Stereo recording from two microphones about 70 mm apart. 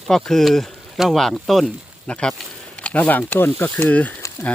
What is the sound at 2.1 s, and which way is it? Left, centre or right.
Speech, centre.